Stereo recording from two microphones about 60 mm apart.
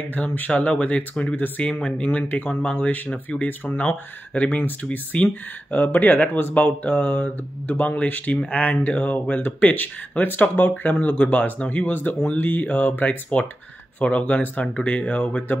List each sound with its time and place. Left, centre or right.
0.1 s speech: left